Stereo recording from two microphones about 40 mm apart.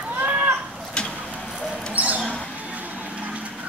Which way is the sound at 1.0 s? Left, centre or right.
Left.